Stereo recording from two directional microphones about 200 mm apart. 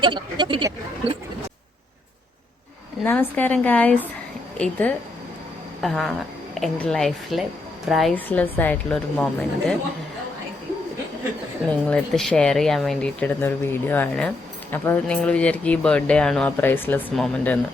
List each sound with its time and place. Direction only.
0.0 s speech: 25° right (ahead or behind)
3.0 s a woman's voice: 10° left (ahead or behind)
11.9 s speech: 5° left (ahead or behind)